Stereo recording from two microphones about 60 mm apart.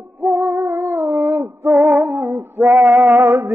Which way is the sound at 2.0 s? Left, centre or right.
Right.